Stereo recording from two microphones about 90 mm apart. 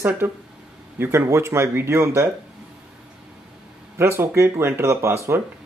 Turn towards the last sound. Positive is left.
turn(degrees=-30)  # may be behind; listen again after turning